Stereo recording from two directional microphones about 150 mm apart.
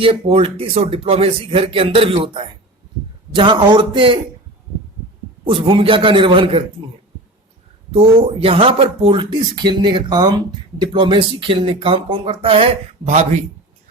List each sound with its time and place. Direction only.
0.0 s speech: 40° right (ahead or behind)
5.5 s speech: 35° right (ahead or behind)
7.9 s speech: 40° right (ahead or behind)